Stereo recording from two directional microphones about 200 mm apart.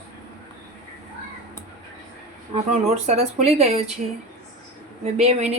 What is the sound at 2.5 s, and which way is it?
Speech, 30° right (ahead or behind).